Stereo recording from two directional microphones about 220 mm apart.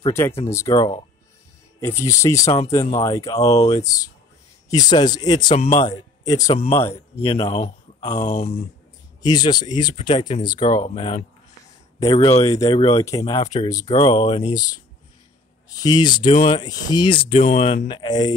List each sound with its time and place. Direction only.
0.0 s speech: 10° left (ahead or behind)
6.5 s speech: 25° left (ahead or behind)
8.0 s speech: 15° left (ahead or behind)
8.3 s speech: 30° left (ahead or behind)
9.2 s speech: 20° left (ahead or behind)
13.9 s speech: 30° left (ahead or behind)
15.8 s speech: 20° left (ahead or behind)